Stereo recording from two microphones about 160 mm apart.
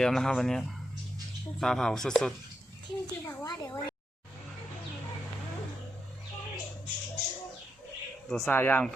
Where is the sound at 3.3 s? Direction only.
25° left (ahead or behind).